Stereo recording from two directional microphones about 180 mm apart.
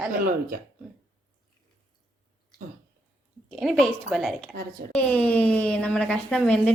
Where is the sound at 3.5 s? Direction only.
Centre (ahead or behind).